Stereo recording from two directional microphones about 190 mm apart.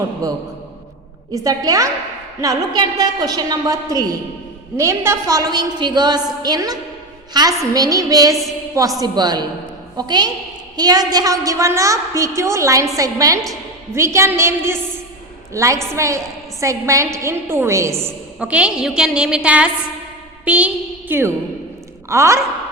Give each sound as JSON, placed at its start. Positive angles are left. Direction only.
{"t": 1.5, "sound": "a woman's voice", "side_deg": -15}